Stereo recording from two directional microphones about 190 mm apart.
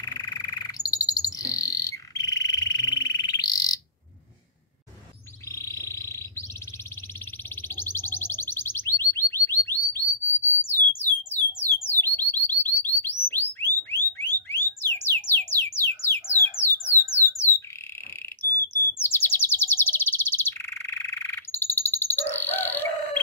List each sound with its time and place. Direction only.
0.0 s bird: 20° left (ahead or behind)
5.5 s a sound: 15° left (ahead or behind)
7.6 s a sound: 10° left (ahead or behind)
11.6 s alarm: 10° left (ahead or behind)
17.1 s squawk: 15° left (ahead or behind)
18.9 s bird: 10° left (ahead or behind)